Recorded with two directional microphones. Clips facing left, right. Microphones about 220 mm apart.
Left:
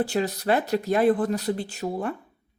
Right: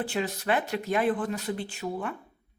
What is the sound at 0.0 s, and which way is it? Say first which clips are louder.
Speech: left 5 dB; 40° left (ahead or behind).